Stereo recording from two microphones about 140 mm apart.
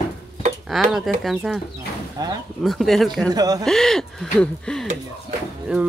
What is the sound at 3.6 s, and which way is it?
Speech, 5° left (ahead or behind).